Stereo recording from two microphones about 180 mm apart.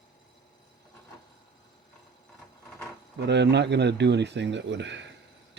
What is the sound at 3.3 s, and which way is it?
Speech, 70° right (ahead or behind).